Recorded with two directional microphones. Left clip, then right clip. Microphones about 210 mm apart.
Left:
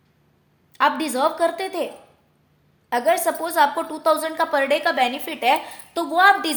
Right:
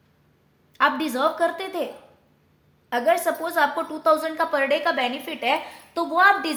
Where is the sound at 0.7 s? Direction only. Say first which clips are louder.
Left 1 dB; 35° left (ahead or behind).